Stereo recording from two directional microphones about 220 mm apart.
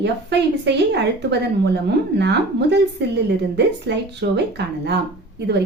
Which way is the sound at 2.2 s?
50° right (ahead or behind).